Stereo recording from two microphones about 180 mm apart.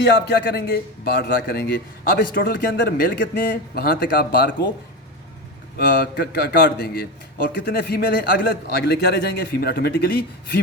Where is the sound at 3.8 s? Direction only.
55° left (ahead or behind).